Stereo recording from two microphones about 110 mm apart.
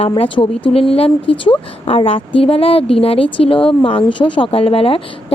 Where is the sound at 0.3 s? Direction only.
55° left (ahead or behind).